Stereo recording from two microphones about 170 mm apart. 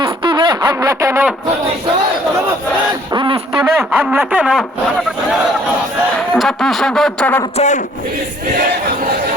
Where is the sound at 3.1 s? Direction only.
30° right (ahead or behind).